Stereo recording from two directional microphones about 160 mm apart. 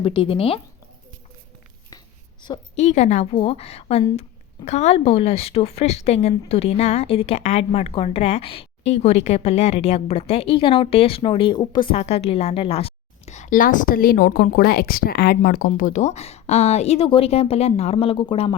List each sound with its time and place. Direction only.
0.0 s speech: 35° left (ahead or behind)
2.7 s speech: 45° left (ahead or behind); by 11.9 s 30° left (ahead or behind)
11.9 s a woman's voice: 40° left (ahead or behind)